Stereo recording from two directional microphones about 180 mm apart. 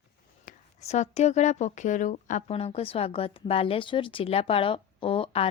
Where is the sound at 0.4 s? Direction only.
40° left (ahead or behind).